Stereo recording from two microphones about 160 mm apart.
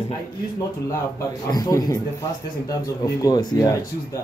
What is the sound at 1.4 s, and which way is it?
Speech, 25° left (ahead or behind).